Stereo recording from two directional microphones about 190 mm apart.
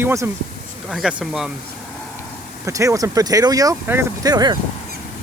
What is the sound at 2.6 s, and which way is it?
Speech, 15° right (ahead or behind).